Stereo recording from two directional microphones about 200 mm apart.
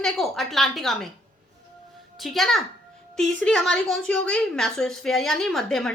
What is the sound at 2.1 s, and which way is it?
A woman's voice, centre (ahead or behind).